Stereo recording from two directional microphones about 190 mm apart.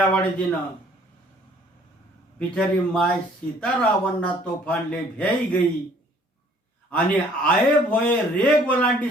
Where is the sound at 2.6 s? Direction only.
5° left (ahead or behind).